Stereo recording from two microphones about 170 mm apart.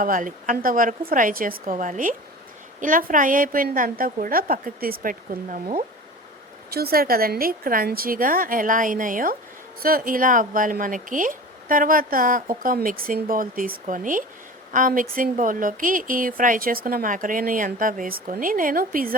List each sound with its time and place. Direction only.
0.0 s a woman's voice: 50° right (ahead or behind)
6.7 s a woman's voice: 65° right (ahead or behind)